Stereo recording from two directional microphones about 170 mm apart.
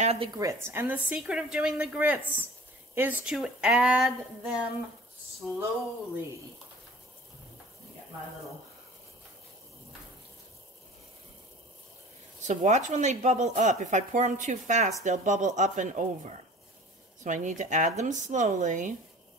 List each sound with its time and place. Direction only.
0.0 s speech: 35° right (ahead or behind)
0.4 s a woman's voice: 15° right (ahead or behind); by 5.6 s centre (ahead or behind)
12.4 s speech: 45° right (ahead or behind)